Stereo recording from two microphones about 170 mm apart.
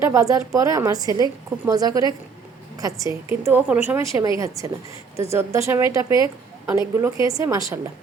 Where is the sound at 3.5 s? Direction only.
10° right (ahead or behind).